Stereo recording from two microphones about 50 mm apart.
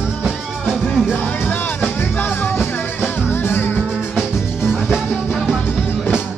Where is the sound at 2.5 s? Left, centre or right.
Left.